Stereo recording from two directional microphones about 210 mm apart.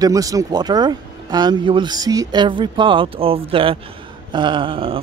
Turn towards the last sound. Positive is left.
turn(degrees=-25)  # may be behind; listen again after turning